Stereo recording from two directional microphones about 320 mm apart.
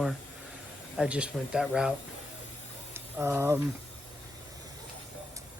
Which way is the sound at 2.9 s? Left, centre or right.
Centre.